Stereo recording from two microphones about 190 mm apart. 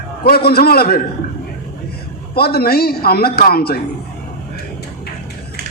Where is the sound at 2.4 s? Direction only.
55° left (ahead or behind).